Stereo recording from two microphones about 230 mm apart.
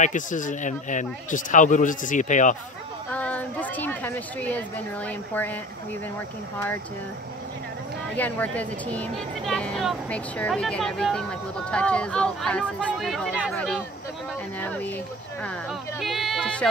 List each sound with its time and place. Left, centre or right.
0.0 s speech: left
3.1 s a woman's voice: centre
8.2 s speech: centre
16.0 s speech: centre